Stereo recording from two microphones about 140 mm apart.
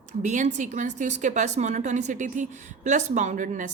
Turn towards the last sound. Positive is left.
turn(degrees=-65)  # may be behind; listen again after turning